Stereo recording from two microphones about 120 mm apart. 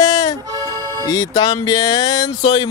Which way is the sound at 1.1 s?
30° left (ahead or behind).